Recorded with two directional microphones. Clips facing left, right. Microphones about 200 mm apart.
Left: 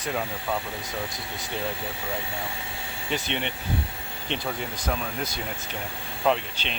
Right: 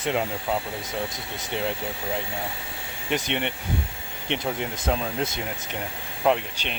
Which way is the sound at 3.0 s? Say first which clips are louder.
Right 3 dB; 15° right (ahead or behind).